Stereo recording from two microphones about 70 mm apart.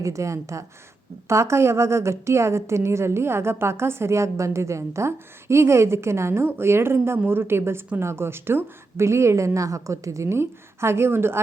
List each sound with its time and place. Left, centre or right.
0.0 s a woman's voice: right